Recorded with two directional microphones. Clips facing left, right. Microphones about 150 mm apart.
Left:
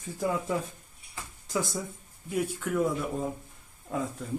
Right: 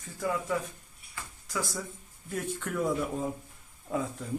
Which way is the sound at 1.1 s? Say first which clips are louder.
Left 4 dB; 25° left (ahead or behind).